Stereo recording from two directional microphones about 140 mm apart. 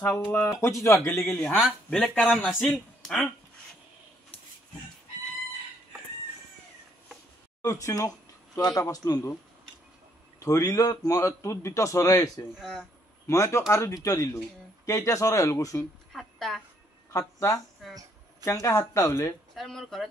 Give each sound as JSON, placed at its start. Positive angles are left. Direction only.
{"t": 0.0, "sound": "a man's voice", "side_deg": 20}
{"t": 1.3, "sound": "speech", "side_deg": 5}
{"t": 7.6, "sound": "a man's voice", "side_deg": 20}
{"t": 10.4, "sound": "a man's voice", "side_deg": 25}
{"t": 12.5, "sound": "speech", "side_deg": 0}
{"t": 13.3, "sound": "a man's voice", "side_deg": 20}
{"t": 16.1, "sound": "a woman's voice", "side_deg": 0}
{"t": 17.1, "sound": "a man's voice", "side_deg": 20}
{"t": 19.5, "sound": "speech", "side_deg": 0}